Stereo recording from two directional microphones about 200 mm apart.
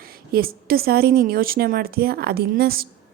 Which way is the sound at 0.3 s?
50° right (ahead or behind).